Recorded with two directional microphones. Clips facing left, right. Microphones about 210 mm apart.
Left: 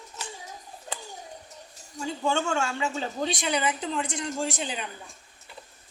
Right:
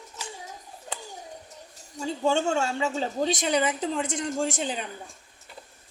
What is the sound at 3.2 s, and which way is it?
Speech, 40° right (ahead or behind).